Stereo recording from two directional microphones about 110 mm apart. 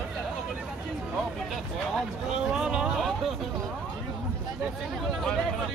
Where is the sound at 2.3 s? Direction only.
5° right (ahead or behind).